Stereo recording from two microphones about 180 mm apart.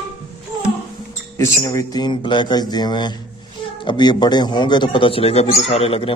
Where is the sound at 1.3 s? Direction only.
15° left (ahead or behind).